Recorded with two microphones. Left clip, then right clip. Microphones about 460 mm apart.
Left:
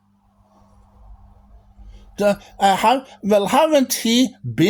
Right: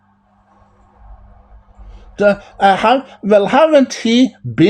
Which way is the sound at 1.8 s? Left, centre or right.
Left.